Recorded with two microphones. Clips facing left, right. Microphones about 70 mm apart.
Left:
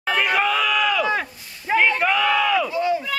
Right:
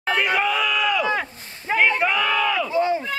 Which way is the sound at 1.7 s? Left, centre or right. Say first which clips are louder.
Left 1 dB; centre.